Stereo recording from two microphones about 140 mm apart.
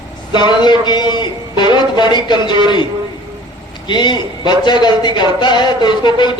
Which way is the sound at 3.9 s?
35° left (ahead or behind).